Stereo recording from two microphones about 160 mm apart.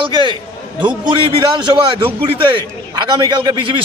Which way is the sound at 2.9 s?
25° right (ahead or behind).